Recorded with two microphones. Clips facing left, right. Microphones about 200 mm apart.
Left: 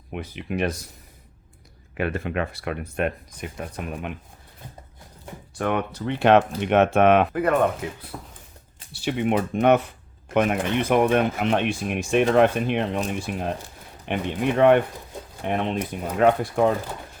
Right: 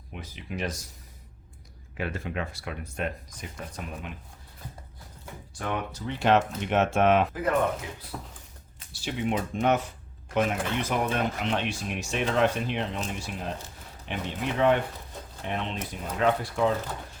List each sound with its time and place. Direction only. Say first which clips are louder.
0.1 s speech: left 8 dB; 60° left (ahead or behind)
2.0 s speech: left 6 dB; 60° left (ahead or behind)
5.5 s speech: left 7 dB; 60° left (ahead or behind)